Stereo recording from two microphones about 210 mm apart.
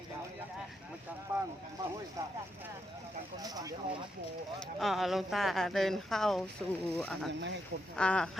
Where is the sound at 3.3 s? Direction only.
20° right (ahead or behind).